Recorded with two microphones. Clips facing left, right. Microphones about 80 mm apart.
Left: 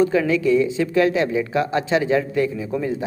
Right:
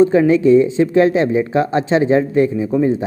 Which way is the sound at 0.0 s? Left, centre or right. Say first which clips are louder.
Right 6 dB; right.